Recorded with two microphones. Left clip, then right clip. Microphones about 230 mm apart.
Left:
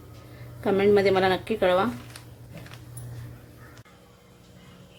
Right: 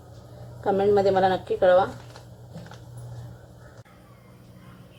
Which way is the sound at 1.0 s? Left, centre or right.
Left.